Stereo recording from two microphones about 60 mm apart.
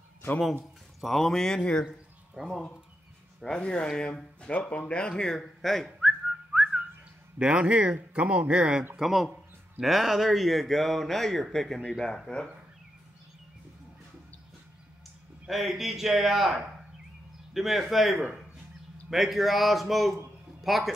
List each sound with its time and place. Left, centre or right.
1.0 s speech: centre
2.4 s speech: centre
3.3 s speech: centre
5.9 s whistling: centre
7.3 s speech: centre
8.9 s speech: centre
15.4 s speech: centre